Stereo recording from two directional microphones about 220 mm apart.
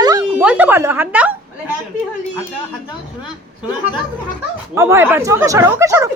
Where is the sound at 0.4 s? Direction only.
5° right (ahead or behind).